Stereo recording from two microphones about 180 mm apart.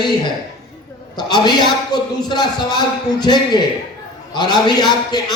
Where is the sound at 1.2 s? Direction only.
25° left (ahead or behind).